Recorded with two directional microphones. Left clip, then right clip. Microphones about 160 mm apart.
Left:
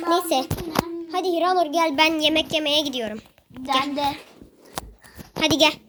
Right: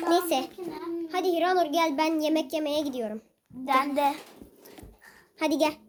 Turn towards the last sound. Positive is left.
turn(degrees=0)  # may be behind; listen again after turning